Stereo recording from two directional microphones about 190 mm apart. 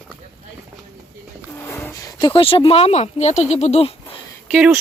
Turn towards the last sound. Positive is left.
turn(degrees=-5)  # may be behind; listen again after turning